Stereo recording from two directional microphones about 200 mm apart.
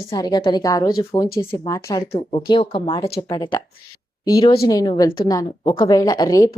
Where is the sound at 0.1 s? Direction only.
20° left (ahead or behind).